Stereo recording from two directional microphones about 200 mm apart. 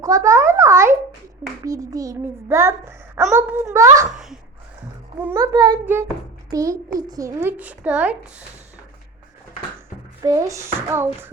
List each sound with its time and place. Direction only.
0.0 s a child's voice: 15° right (ahead or behind)
5.2 s a child's voice: 15° right (ahead or behind)
10.2 s a child's voice: 15° right (ahead or behind)